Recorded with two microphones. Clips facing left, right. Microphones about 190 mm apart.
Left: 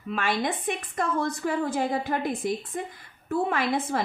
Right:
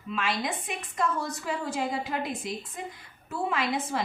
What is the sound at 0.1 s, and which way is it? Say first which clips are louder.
A woman's voice: left 3 dB; 50° left (ahead or behind).